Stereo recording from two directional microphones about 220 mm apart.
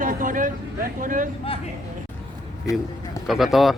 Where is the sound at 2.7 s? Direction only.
15° left (ahead or behind).